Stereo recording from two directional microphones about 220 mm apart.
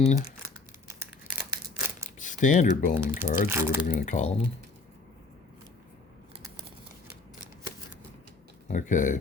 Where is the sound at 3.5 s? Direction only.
10° right (ahead or behind).